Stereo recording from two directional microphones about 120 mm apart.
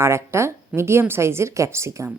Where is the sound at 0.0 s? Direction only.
20° right (ahead or behind).